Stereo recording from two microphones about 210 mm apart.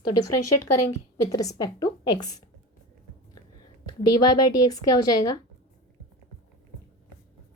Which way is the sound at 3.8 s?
20° left (ahead or behind).